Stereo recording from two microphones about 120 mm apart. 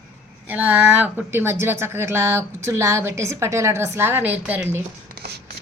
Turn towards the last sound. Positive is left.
turn(degrees=-10)  # may be behind; listen again after turning